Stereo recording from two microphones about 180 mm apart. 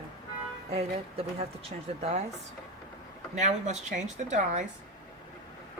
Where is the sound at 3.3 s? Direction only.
40° right (ahead or behind).